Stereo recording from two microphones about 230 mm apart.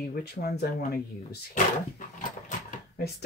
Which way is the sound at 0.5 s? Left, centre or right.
Left.